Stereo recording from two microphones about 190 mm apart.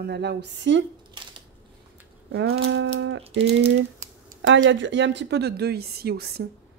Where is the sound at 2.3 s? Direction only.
60° right (ahead or behind).